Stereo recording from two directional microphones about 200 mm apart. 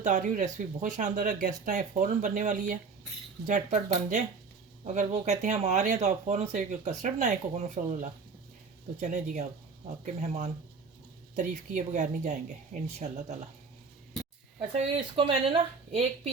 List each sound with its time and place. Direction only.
0.0 s speech: 40° right (ahead or behind)
14.8 s speech: 30° right (ahead or behind)